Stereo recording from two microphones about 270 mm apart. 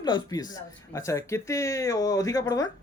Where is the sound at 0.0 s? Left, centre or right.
Centre.